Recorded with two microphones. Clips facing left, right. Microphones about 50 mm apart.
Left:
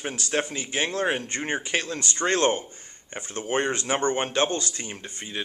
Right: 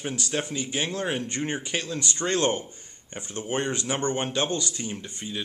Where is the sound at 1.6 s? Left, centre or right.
Left.